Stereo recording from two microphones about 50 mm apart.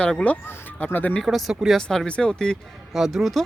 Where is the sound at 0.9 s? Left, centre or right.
Left.